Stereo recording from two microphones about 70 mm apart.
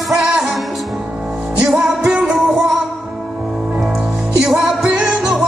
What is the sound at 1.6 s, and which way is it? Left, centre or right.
Music, centre.